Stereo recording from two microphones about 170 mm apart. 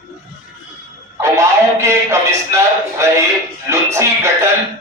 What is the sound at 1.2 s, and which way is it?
Music, 15° right (ahead or behind).